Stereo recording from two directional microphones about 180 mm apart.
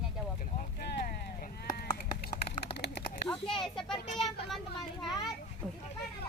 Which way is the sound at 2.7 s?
65° left (ahead or behind).